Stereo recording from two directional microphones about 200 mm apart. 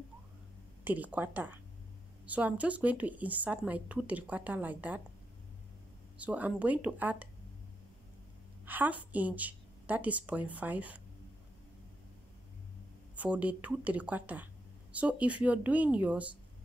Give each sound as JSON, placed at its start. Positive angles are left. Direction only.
{"t": 0.8, "sound": "speech", "side_deg": -10}
{"t": 6.1, "sound": "speech", "side_deg": -5}
{"t": 8.6, "sound": "speech", "side_deg": -10}
{"t": 13.1, "sound": "speech", "side_deg": -5}